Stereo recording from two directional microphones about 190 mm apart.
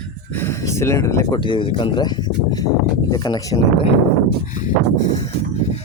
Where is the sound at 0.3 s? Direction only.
15° left (ahead or behind).